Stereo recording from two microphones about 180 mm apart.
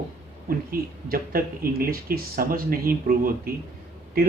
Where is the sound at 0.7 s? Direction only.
55° right (ahead or behind).